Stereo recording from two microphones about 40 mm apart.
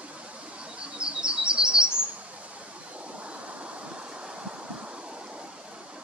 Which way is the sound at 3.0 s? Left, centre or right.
Right.